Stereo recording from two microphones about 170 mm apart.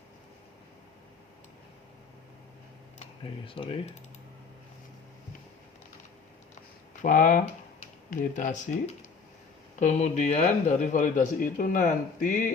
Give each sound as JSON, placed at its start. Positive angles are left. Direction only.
{"t": 3.0, "sound": "speech", "side_deg": 30}
{"t": 7.0, "sound": "a man's voice", "side_deg": 50}
{"t": 9.8, "sound": "a man's voice", "side_deg": 40}